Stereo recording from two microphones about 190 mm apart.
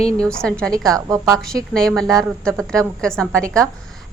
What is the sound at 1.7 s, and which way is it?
A woman's voice, 5° left (ahead or behind).